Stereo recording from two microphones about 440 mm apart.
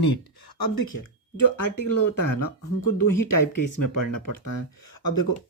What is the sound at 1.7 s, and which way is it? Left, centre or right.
Speech, left.